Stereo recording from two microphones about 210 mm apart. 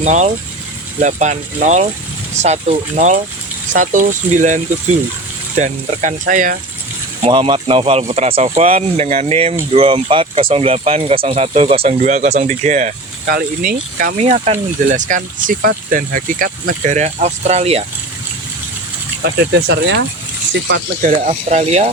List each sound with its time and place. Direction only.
0.0 s speech: 35° right (ahead or behind)
7.2 s speech: 25° right (ahead or behind)
19.2 s speech: 55° right (ahead or behind)
21.0 s speech: 30° right (ahead or behind)